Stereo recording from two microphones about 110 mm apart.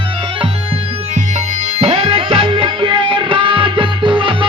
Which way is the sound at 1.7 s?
70° right (ahead or behind).